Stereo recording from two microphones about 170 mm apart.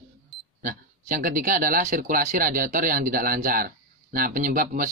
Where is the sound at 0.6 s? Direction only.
50° right (ahead or behind).